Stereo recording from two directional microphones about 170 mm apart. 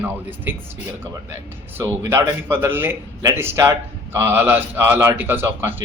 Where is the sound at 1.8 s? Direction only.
15° right (ahead or behind).